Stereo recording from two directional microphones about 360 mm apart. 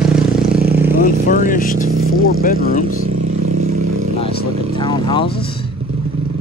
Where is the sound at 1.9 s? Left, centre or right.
Right.